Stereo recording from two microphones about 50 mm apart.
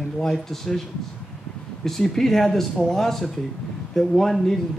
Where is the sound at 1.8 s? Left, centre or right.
Centre.